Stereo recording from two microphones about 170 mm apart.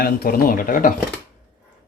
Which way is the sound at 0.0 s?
60° left (ahead or behind).